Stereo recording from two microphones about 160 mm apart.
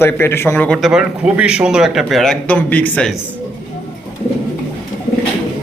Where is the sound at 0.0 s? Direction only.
15° left (ahead or behind).